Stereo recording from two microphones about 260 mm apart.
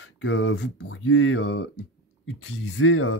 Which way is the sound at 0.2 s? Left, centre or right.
Left.